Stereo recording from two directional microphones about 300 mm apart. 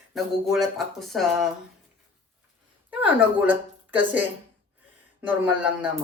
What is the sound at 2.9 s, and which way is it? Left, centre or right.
Speech, centre.